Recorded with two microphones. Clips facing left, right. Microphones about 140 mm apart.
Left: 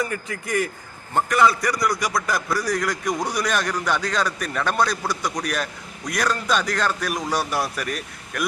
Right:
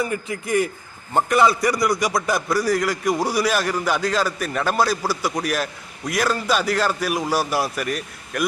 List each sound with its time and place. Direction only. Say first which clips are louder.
0.0 s a man's voice: right 2 dB; 25° right (ahead or behind)
2.6 s a man's voice: right 4 dB; 5° right (ahead or behind)